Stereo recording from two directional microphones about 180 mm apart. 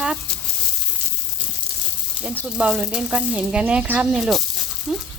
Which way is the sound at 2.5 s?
5° right (ahead or behind).